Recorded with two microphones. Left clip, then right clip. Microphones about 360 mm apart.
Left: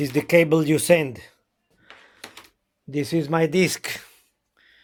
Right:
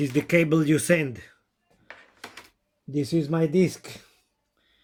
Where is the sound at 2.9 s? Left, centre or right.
Left.